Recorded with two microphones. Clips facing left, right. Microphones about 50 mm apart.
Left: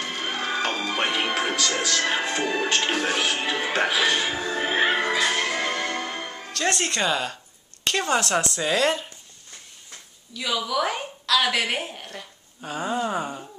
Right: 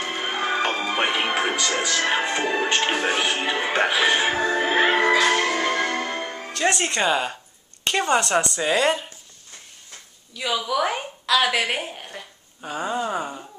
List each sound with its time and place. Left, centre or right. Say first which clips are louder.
0.0 s speech: right 3 dB; centre
4.8 s music: right 3 dB; right
5.5 s music: right 4 dB; centre
6.5 s a woman's voice: right 2 dB; centre
10.3 s a woman's voice: right 2 dB; centre